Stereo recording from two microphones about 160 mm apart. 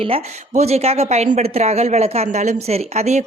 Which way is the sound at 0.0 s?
40° right (ahead or behind).